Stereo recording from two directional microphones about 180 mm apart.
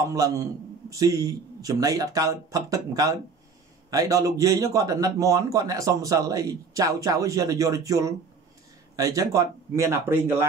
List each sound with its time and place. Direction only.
0.0 s a man's voice: 20° right (ahead or behind)